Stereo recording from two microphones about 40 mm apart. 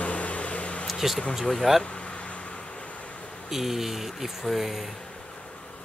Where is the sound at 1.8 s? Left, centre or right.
Left.